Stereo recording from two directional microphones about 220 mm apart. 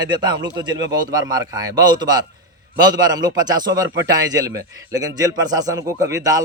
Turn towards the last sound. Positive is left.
turn(degrees=-15)  # may be behind; listen again after turning